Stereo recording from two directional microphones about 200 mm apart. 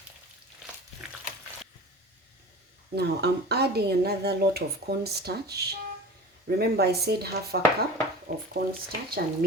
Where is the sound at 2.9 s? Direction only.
55° right (ahead or behind).